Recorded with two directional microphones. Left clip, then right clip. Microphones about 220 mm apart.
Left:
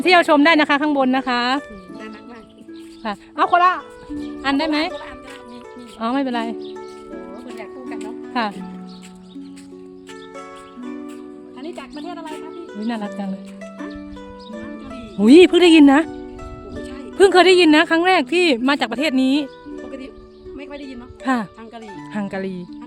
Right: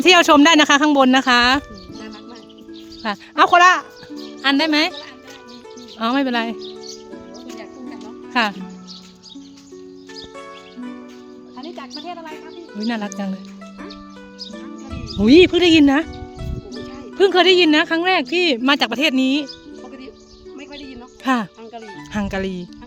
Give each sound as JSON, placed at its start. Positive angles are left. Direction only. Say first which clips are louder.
{"t": 0.0, "sound": "speech", "louder": "right 2 dB", "side_deg": -10}
{"t": 3.3, "sound": "speech", "louder": "right 4 dB", "side_deg": -15}
{"t": 4.4, "sound": "speech", "louder": "right 3 dB", "side_deg": -5}
{"t": 6.0, "sound": "speech", "louder": "right 2 dB", "side_deg": -5}
{"t": 7.6, "sound": "music", "louder": "left 3 dB", "side_deg": 40}
{"t": 8.3, "sound": "speech", "louder": "right 4 dB", "side_deg": -5}
{"t": 11.7, "sound": "music", "louder": "right 1 dB", "side_deg": 40}
{"t": 12.7, "sound": "speech", "louder": "right 2 dB", "side_deg": -5}
{"t": 15.2, "sound": "speech", "louder": "left 2 dB", "side_deg": 10}
{"t": 17.2, "sound": "speech", "louder": "left 1 dB", "side_deg": 5}
{"t": 18.6, "sound": "speech", "louder": "right 2 dB", "side_deg": -5}
{"t": 20.6, "sound": "music", "louder": "left 2 dB", "side_deg": 55}
{"t": 21.2, "sound": "speech", "louder": "right 2 dB", "side_deg": -5}